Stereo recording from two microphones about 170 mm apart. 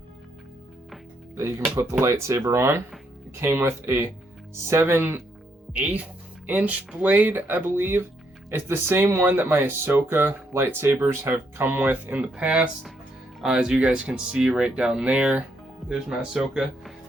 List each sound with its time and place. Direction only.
1.4 s speech: 15° right (ahead or behind)